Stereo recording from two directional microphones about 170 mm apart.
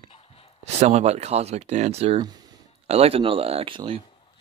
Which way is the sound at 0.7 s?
40° right (ahead or behind).